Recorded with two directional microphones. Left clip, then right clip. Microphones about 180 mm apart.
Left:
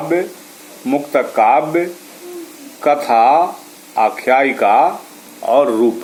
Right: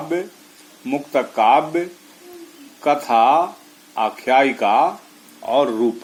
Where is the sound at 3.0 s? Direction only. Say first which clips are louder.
Left 3 dB; 50° right (ahead or behind).